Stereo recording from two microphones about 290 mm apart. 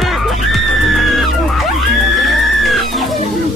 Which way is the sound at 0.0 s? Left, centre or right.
Centre.